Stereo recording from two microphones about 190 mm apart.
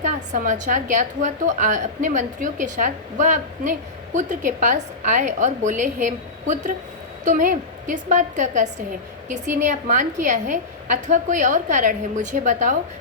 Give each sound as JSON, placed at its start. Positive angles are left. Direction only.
{"t": 0.0, "sound": "a woman's voice", "side_deg": -40}